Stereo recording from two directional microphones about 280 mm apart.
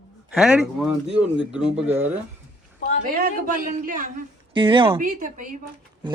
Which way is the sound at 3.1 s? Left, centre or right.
Right.